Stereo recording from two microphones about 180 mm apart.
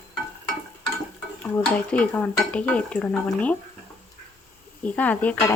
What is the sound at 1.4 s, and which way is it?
Stir, 10° left (ahead or behind).